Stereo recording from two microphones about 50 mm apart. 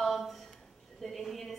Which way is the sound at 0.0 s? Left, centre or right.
Centre.